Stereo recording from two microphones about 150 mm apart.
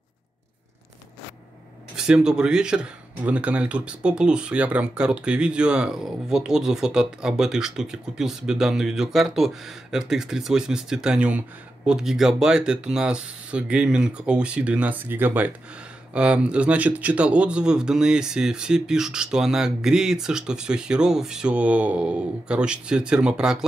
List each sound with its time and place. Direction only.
2.0 s speech: 5° right (ahead or behind)